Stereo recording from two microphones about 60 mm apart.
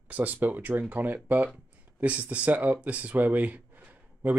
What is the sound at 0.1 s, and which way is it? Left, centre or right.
Speech, right.